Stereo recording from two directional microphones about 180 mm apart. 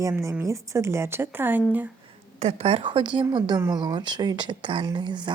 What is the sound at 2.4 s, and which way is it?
Speech, 35° right (ahead or behind).